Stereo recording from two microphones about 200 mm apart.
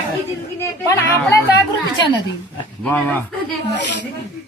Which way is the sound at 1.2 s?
20° left (ahead or behind).